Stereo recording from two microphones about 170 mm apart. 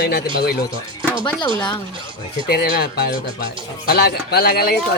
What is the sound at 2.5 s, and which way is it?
Speech, 70° left (ahead or behind).